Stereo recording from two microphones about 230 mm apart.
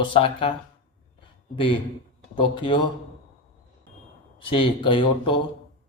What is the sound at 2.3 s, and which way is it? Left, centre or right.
Speech, left.